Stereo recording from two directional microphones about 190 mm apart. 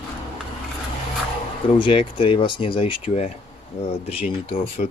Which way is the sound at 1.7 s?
25° left (ahead or behind).